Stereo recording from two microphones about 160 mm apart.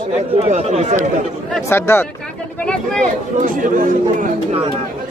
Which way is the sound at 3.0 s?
55° right (ahead or behind).